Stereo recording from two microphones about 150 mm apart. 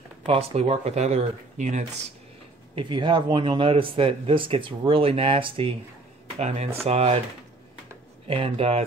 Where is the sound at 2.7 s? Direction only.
35° right (ahead or behind).